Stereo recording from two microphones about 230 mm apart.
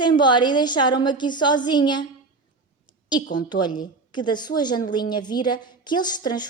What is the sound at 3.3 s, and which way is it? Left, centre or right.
A woman's voice, centre.